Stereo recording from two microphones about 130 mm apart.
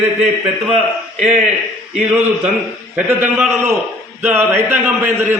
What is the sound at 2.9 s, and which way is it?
A man's voice, 10° right (ahead or behind).